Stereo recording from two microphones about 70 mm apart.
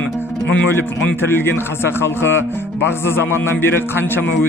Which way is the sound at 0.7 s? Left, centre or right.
Left.